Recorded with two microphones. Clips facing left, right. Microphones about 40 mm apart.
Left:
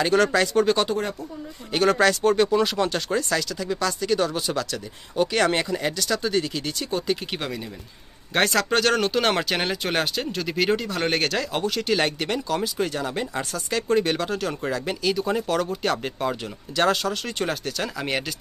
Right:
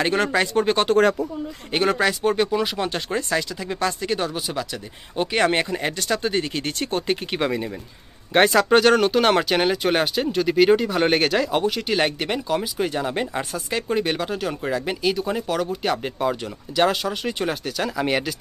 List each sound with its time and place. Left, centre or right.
0.0 s speech: right
1.9 s speech: centre
3.1 s speech: right
4.3 s speech: centre
5.1 s speech: right
7.3 s speech: centre